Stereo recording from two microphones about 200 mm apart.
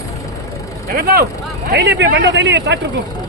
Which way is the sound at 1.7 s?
60° right (ahead or behind).